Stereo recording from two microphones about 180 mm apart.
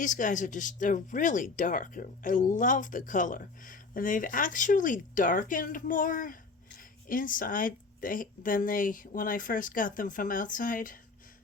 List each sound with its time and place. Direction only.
0.0 s speech: 45° left (ahead or behind)